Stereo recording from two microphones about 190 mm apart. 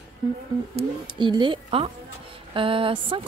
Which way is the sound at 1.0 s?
25° right (ahead or behind).